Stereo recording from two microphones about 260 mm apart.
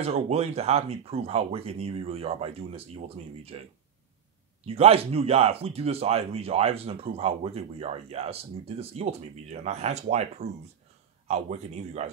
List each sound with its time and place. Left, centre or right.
0.0 s speech: right
4.6 s speech: right